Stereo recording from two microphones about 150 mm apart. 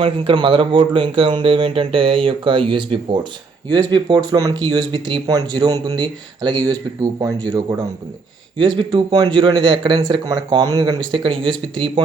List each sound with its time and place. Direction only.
0.0 s speech: 35° right (ahead or behind)